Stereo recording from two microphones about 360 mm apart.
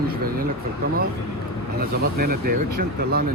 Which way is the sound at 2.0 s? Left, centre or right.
Right.